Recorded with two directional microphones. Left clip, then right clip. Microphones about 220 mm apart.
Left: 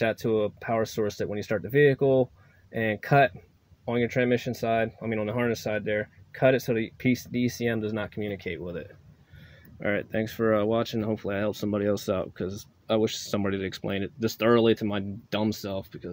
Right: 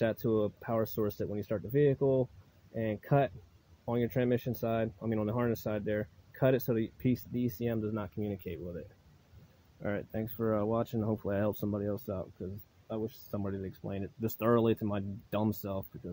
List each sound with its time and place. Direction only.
0.0 s speech: 15° right (ahead or behind)
9.8 s speech: centre (ahead or behind)
11.7 s speech: 5° left (ahead or behind)
12.8 s speech: 20° left (ahead or behind); by 15.8 s 10° right (ahead or behind)